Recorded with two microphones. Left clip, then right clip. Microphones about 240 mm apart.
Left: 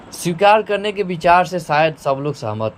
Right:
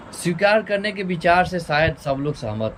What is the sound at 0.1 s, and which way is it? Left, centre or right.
Speech, centre.